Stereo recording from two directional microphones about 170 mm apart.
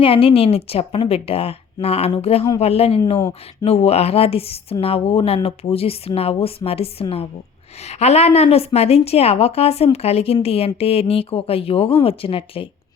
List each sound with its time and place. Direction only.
0.0 s a woman's voice: 30° left (ahead or behind)